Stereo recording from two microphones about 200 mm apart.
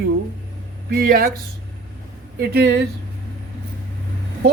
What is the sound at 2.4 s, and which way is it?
Speech, 55° right (ahead or behind).